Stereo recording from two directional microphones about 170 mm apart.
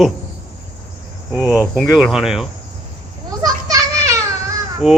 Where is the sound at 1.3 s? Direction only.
5° right (ahead or behind).